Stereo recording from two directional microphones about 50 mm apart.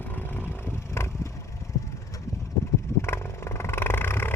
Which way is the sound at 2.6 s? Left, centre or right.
Left.